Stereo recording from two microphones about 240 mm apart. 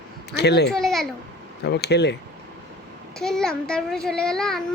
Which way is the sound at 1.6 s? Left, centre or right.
Left.